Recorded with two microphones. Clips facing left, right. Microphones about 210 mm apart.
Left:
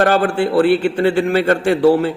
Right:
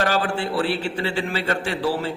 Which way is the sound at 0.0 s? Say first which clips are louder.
Left 8 dB; 55° left (ahead or behind).